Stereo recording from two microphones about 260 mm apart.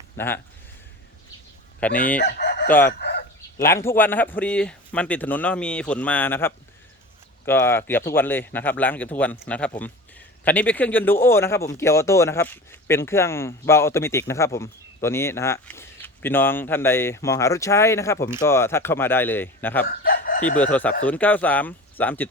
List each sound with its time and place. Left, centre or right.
0.2 s speech: centre
1.8 s speech: centre
2.1 s chicken: left
2.6 s speech: centre
3.0 s bow-wow: left
3.7 s speech: centre
19.8 s chicken: left
20.6 s speech: centre